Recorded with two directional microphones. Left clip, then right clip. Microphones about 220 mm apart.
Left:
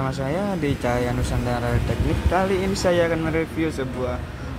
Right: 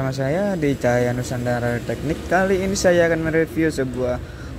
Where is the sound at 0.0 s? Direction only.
15° right (ahead or behind).